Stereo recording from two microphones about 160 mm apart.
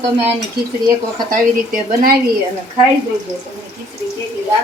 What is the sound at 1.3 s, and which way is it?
Speech, 65° right (ahead or behind).